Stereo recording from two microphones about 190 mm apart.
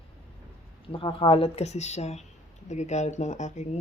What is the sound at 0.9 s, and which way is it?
A woman's voice, 25° left (ahead or behind).